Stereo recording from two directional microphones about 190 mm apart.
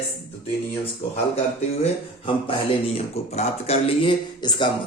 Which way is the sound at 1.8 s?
30° left (ahead or behind).